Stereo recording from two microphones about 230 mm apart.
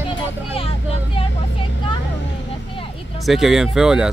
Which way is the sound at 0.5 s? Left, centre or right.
Left.